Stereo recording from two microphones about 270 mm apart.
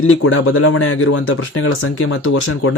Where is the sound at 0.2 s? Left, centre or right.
Left.